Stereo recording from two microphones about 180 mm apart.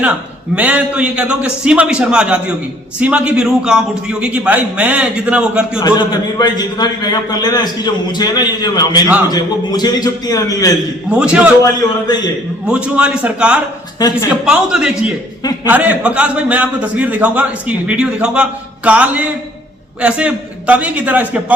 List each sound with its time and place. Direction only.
0.5 s a man's voice: 5° right (ahead or behind)
6.4 s a man's voice: 25° left (ahead or behind)
11.1 s a man's voice: 5° right (ahead or behind)
11.6 s a man's voice: 20° left (ahead or behind)
12.6 s a man's voice: 5° right (ahead or behind)
14.0 s a man's voice: 20° left (ahead or behind)
14.4 s a man's voice: 5° right (ahead or behind)